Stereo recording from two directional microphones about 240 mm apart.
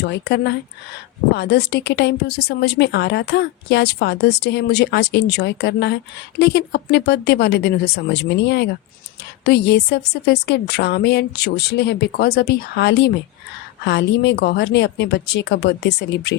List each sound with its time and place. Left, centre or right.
0.0 s a woman's voice: left